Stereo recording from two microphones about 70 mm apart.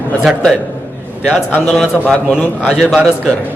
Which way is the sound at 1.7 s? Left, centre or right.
Centre.